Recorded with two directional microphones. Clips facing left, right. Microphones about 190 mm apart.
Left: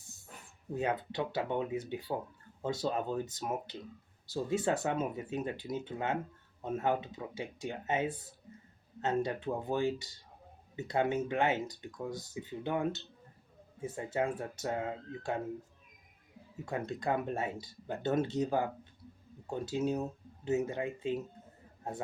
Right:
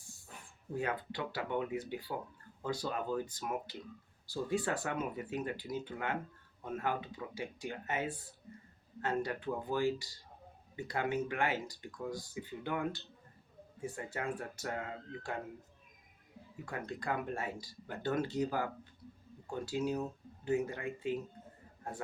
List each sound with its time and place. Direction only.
0.7 s speech: 20° left (ahead or behind)
16.6 s speech: 25° left (ahead or behind)